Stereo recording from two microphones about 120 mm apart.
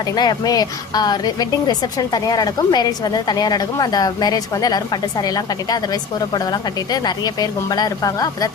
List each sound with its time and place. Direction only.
0.2 s speech: 35° left (ahead or behind)